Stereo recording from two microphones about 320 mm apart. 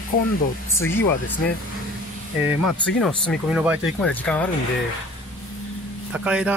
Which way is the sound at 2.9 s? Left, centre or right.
Centre.